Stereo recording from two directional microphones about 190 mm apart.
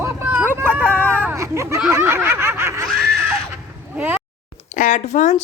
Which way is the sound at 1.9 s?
10° right (ahead or behind).